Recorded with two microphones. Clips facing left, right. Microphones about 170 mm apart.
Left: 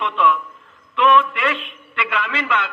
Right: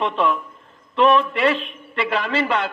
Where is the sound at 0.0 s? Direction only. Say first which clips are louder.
Left 1 dB; 35° right (ahead or behind).